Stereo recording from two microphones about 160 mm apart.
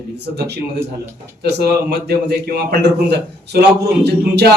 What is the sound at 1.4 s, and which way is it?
A man's voice, 90° right.